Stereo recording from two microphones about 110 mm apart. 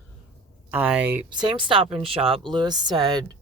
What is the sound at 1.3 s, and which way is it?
Speech, 45° right (ahead or behind).